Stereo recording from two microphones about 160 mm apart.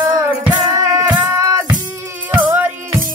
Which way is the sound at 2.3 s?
10° right (ahead or behind).